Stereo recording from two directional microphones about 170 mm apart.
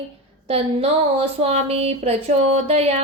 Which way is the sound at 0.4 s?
35° right (ahead or behind).